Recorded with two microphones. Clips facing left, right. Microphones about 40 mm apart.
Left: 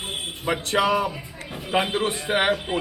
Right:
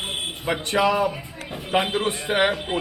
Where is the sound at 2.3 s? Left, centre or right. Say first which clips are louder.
Right 1 dB; centre.